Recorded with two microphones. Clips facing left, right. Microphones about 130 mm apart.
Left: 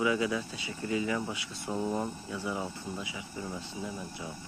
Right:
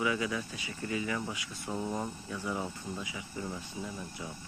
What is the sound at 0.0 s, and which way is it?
Speech, 20° left (ahead or behind).